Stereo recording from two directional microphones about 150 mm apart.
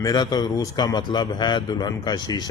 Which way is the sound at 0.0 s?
25° left (ahead or behind).